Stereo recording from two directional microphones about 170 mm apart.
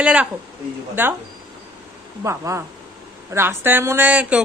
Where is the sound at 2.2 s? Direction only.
15° right (ahead or behind).